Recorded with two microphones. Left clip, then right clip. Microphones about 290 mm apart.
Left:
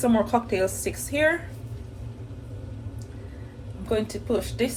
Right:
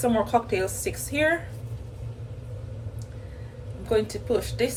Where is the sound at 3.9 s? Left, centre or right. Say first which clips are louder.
Right 2 dB; centre.